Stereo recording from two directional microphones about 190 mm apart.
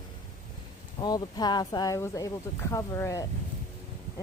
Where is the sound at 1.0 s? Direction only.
20° left (ahead or behind).